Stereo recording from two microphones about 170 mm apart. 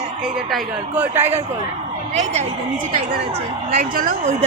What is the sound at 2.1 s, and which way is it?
Speech, 40° right (ahead or behind).